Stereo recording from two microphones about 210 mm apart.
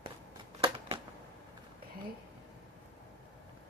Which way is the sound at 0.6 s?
25° right (ahead or behind).